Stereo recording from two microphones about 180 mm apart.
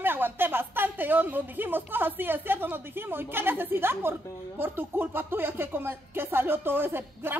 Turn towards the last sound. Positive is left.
turn(degrees=-10)  # may be behind; listen again after turning